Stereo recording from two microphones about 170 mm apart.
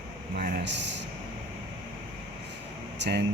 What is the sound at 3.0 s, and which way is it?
Speech, 90° right.